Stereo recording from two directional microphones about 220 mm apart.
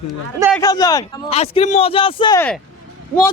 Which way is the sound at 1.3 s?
30° left (ahead or behind).